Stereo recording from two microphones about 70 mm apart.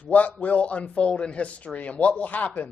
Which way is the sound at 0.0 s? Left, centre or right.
Left.